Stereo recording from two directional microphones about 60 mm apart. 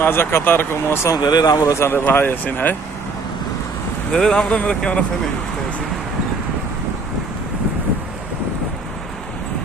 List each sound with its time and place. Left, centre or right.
0.0 s speech: left
1.1 s speech: left
1.7 s speech: left
4.1 s speech: centre